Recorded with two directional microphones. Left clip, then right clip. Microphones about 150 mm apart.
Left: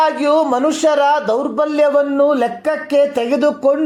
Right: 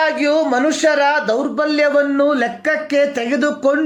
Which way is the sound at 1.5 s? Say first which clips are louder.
Left 2 dB; 20° left (ahead or behind).